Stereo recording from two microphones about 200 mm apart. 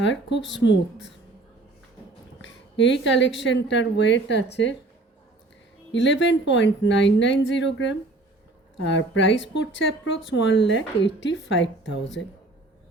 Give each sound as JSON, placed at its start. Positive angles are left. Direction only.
{"t": 0.0, "sound": "speech", "side_deg": 65}
{"t": 2.4, "sound": "speech", "side_deg": 65}
{"t": 5.9, "sound": "speech", "side_deg": 65}